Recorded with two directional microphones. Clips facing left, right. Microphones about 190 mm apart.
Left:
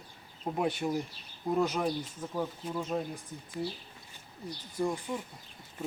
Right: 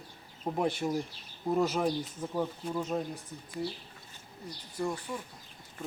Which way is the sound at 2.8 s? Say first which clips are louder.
Even; centre (ahead or behind).